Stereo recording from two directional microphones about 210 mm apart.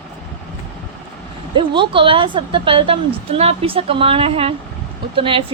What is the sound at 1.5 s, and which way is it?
Speech, 25° right (ahead or behind).